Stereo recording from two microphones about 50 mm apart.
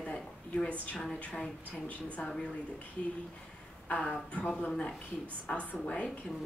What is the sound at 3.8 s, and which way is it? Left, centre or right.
Speech, left.